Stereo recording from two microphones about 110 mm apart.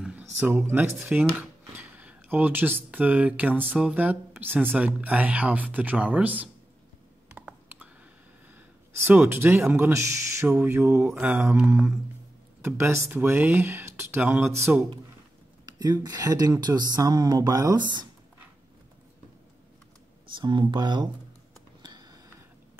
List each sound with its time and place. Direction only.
0.0 s speech: 10° right (ahead or behind)
7.4 s computer keyboard: 15° right (ahead or behind)
9.0 s speech: 20° right (ahead or behind)
15.6 s speech: 35° right (ahead or behind)
17.7 s speech: 45° right (ahead or behind)
20.2 s speech: 45° right (ahead or behind)
21.8 s a sound: 40° right (ahead or behind)